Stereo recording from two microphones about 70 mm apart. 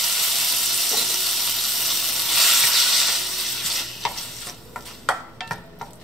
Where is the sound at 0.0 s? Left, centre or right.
Centre.